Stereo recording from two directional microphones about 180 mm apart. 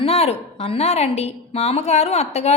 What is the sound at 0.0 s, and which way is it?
A woman's voice, 35° left (ahead or behind).